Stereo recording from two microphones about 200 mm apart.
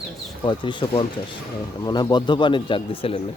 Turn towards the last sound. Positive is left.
turn(degrees=30)  # may be behind; listen again after turning